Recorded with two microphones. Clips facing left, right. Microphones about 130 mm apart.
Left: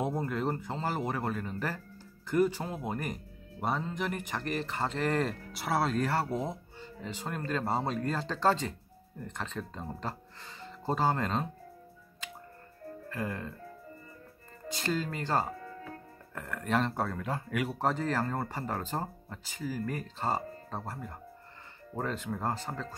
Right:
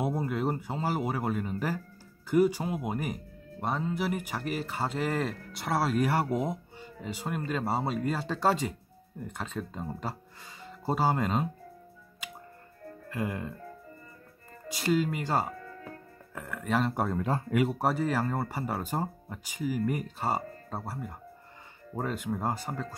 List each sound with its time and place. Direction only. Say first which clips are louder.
0.0 s speech: right 2 dB; 10° right (ahead or behind)
13.1 s speech: right 3 dB; 15° right (ahead or behind)
14.7 s speech: right 5 dB; 10° right (ahead or behind)
16.9 s speech: right 3 dB; 15° right (ahead or behind)
17.2 s speech: right 6 dB; 25° right (ahead or behind)
17.7 s speech: right 2 dB; 10° right (ahead or behind)